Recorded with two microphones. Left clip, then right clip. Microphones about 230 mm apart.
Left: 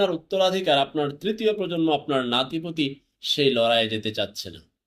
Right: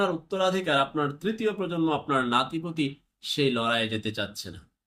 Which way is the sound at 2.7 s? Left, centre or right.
Right.